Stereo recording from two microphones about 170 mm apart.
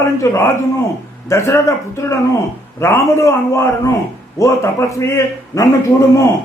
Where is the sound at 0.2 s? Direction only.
15° left (ahead or behind).